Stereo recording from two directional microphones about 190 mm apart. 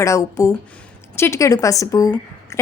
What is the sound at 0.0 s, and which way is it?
A woman's voice, 15° left (ahead or behind).